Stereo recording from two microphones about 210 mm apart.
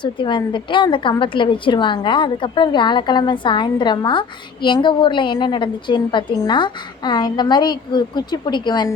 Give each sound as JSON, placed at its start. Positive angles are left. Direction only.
{"t": 0.0, "sound": "a woman's voice", "side_deg": 20}